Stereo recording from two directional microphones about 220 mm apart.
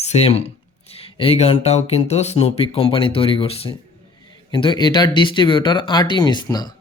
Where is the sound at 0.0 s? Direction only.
30° left (ahead or behind).